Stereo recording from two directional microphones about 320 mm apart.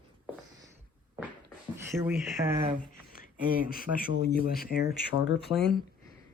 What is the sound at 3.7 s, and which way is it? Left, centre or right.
A man's voice, left.